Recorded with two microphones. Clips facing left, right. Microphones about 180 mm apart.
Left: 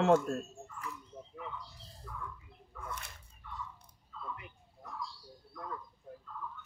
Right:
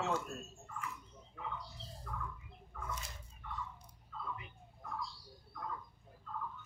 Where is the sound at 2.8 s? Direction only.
60° left (ahead or behind).